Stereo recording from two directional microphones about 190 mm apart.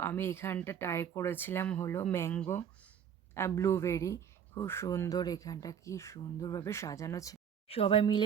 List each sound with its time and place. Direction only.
0.0 s speech: 10° left (ahead or behind)
7.7 s speech: 30° left (ahead or behind)